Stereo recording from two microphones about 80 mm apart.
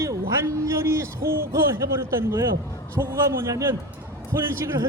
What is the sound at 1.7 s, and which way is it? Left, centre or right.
A man's voice, right.